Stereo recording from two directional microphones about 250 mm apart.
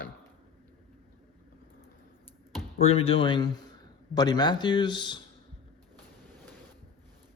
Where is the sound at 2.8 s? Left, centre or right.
Left.